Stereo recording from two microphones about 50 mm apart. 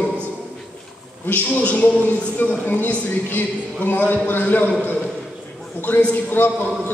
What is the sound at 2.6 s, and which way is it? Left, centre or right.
Speech, left.